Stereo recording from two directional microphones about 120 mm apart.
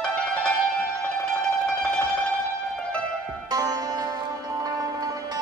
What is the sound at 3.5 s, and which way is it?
Sitar, 30° right (ahead or behind).